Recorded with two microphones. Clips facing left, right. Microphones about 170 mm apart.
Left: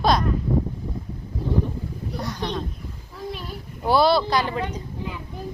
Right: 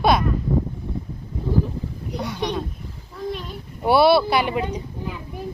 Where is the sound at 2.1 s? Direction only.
10° right (ahead or behind).